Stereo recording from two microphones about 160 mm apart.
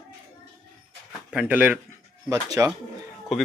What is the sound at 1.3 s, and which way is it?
Speech, 10° right (ahead or behind).